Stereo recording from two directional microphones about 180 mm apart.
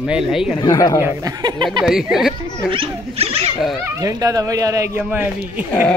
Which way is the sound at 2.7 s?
30° right (ahead or behind).